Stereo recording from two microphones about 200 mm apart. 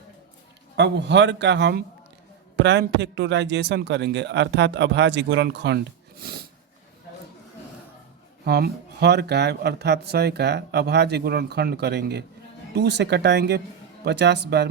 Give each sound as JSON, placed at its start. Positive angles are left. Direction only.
{"t": 0.8, "sound": "speech", "side_deg": -60}
{"t": 8.4, "sound": "speech", "side_deg": -50}